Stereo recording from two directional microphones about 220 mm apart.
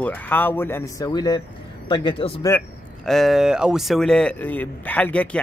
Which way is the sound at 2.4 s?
5° left (ahead or behind).